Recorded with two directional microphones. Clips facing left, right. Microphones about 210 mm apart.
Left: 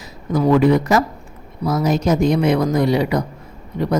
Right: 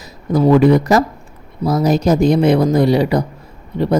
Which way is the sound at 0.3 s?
35° right (ahead or behind).